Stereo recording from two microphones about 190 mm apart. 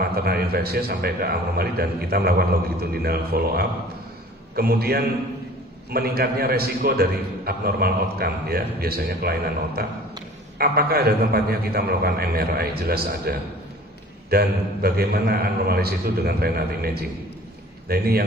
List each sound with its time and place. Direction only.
0.0 s a man's voice: 55° right (ahead or behind)